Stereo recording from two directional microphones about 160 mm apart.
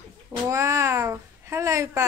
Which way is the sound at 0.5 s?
20° right (ahead or behind).